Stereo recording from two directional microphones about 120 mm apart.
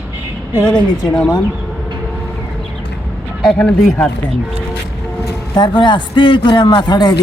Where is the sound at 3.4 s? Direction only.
5° left (ahead or behind).